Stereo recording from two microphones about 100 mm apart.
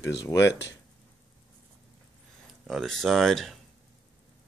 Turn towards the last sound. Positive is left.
turn(degrees=0)  # may be behind; listen again after turning